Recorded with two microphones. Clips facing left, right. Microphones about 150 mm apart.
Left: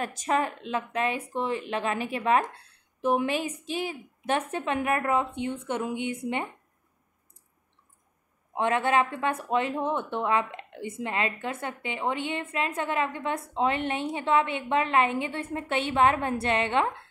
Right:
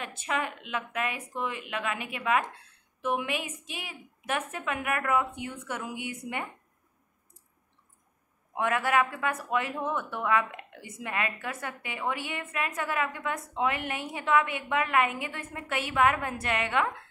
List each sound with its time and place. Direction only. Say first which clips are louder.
0.0 s speech: left 5 dB; 40° left (ahead or behind)
8.5 s speech: left 2 dB; 25° left (ahead or behind)